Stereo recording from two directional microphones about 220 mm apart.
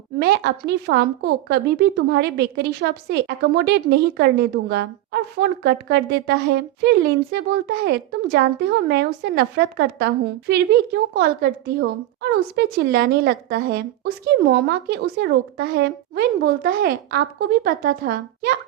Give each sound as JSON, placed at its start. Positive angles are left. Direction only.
{"t": 0.2, "sound": "a woman's voice", "side_deg": -50}